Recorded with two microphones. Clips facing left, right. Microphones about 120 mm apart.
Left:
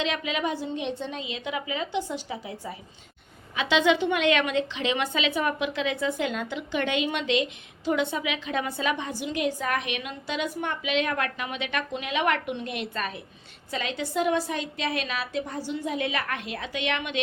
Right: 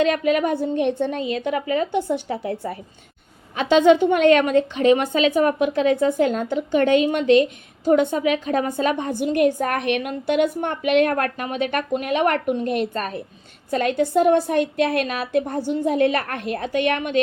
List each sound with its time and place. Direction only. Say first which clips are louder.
0.0 s a woman's voice: right 9 dB; 50° right (ahead or behind)
3.5 s a woman's voice: right 8 dB; 45° right (ahead or behind)